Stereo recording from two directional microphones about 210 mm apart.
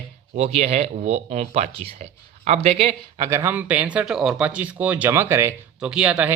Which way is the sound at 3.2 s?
15° right (ahead or behind).